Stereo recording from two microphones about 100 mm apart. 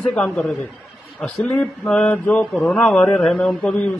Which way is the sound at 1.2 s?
15° left (ahead or behind).